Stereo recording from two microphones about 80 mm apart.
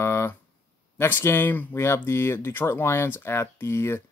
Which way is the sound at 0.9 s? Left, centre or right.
Left.